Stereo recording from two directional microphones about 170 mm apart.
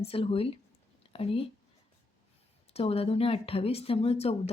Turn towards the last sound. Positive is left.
turn(degrees=35)  # may be behind; listen again after turning